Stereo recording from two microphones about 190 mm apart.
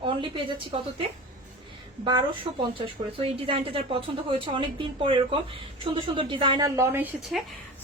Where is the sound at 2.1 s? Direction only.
25° right (ahead or behind).